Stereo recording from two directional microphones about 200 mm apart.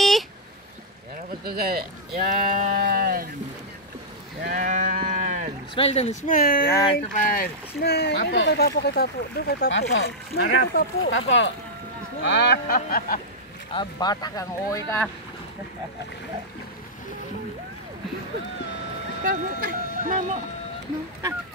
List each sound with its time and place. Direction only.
1.4 s speech: 50° right (ahead or behind)
4.4 s sheep: 40° right (ahead or behind)
5.8 s speech: 30° left (ahead or behind); by 10.9 s 50° left (ahead or behind)
11.0 s speech: 75° left (ahead or behind)
12.3 s speech: 55° left (ahead or behind)
13.7 s speech: 20° left (ahead or behind)
19.2 s speech: 45° right (ahead or behind)